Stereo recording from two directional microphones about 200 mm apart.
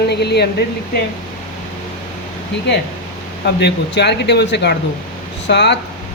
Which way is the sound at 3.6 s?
60° left (ahead or behind).